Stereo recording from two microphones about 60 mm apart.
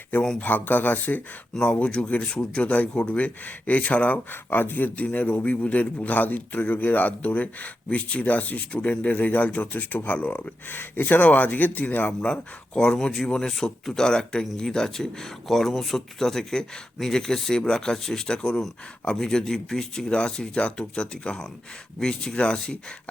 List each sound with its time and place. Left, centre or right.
0.3 s speech: left
1.5 s speech: centre; by 12.1 s left
12.2 s speech: centre